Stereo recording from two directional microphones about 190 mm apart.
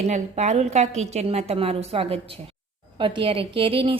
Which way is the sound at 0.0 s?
35° right (ahead or behind).